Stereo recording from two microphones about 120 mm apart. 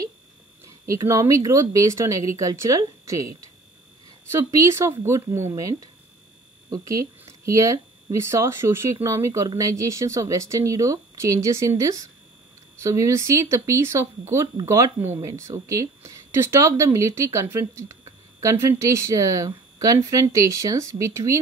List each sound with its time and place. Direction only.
0.7 s speech: 25° right (ahead or behind)